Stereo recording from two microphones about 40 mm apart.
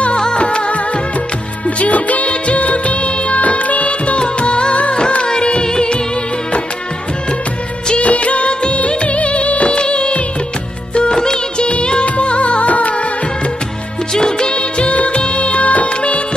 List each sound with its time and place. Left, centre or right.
0.4 s music of bollywood: left
1.8 s music of bollywood: left; by 5.9 s centre
7.9 s music of bollywood: left
11.0 s music: centre; by 12.9 s left
14.1 s music of bollywood: centre